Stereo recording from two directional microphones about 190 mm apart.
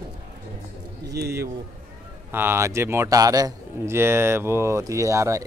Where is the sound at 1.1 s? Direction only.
55° right (ahead or behind).